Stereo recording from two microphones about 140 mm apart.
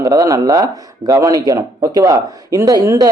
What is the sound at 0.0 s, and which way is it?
Speech, 25° right (ahead or behind).